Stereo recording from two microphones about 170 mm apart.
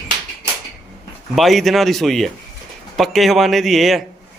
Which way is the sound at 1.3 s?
Centre (ahead or behind).